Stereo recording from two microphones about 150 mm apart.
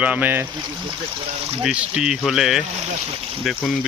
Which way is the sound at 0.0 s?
10° right (ahead or behind).